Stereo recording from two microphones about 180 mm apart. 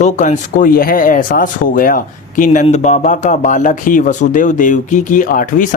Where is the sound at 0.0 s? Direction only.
45° left (ahead or behind).